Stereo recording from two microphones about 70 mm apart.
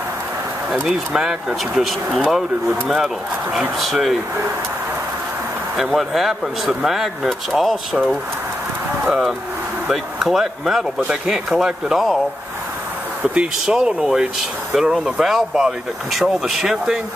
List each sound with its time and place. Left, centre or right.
0.8 s speech: centre
5.8 s speech: centre
9.8 s speech: centre
13.2 s speech: centre